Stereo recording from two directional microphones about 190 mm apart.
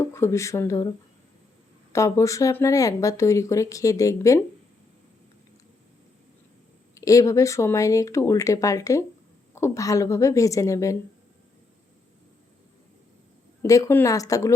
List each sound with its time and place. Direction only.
0.0 s speech: 15° left (ahead or behind)
6.9 s speech: 15° left (ahead or behind)
13.6 s speech: 15° left (ahead or behind)